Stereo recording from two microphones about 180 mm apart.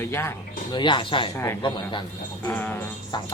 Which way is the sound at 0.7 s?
25° left (ahead or behind).